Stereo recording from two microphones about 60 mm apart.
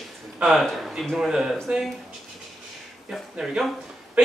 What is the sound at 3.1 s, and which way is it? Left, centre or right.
Speech, centre.